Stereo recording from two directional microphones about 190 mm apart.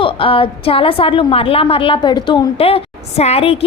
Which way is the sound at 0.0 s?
30° left (ahead or behind).